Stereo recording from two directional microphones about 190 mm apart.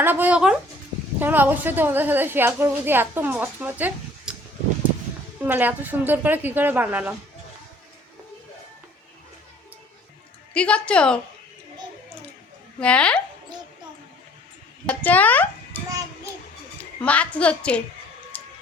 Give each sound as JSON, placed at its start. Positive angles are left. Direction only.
{"t": 0.0, "sound": "a woman's voice", "side_deg": -10}
{"t": 5.4, "sound": "a woman's voice", "side_deg": -10}
{"t": 10.5, "sound": "a woman's voice", "side_deg": 5}
{"t": 12.8, "sound": "a woman's voice", "side_deg": 5}
{"t": 14.8, "sound": "a child's voice", "side_deg": 10}
{"t": 17.0, "sound": "a woman's voice", "side_deg": 5}
{"t": 18.3, "sound": "a sound", "side_deg": 5}